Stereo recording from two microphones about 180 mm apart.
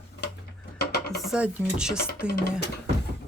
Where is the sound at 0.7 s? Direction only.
65° left (ahead or behind).